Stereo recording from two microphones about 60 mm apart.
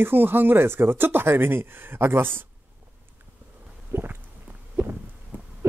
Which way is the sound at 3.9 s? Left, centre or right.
Right.